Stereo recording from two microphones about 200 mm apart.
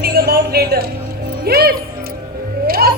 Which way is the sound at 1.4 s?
50° right (ahead or behind).